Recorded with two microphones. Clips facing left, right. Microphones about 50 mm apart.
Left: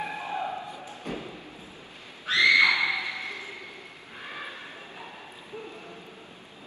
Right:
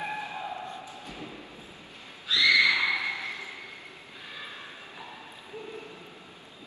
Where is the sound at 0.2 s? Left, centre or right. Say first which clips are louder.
Left 4 dB; left.